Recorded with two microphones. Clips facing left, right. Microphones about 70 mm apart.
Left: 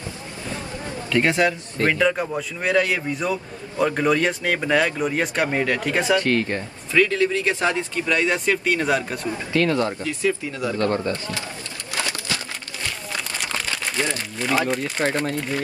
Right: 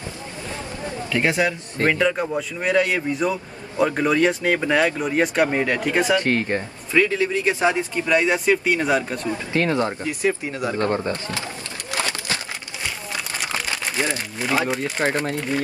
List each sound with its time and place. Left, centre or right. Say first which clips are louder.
1.1 s speech: left 2 dB; centre
6.1 s speech: even; right; by 9.2 s centre
9.5 s speech: left 1 dB; right
14.0 s speech: even; centre